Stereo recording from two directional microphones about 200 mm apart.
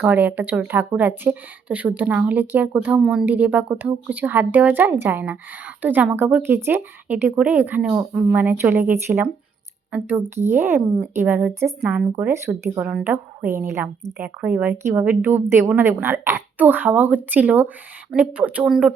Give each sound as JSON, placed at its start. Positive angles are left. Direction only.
{"t": 0.0, "sound": "speech", "side_deg": -10}